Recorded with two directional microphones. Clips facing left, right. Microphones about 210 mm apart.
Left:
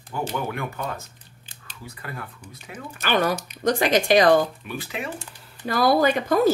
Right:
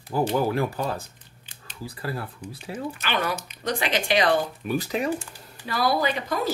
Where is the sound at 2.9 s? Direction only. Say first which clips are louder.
Left 8 dB; 45° left (ahead or behind).